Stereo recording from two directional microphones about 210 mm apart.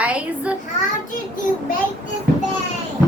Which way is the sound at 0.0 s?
5° right (ahead or behind).